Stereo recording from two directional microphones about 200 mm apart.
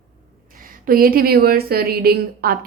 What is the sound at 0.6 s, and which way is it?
A woman's voice, 45° right (ahead or behind).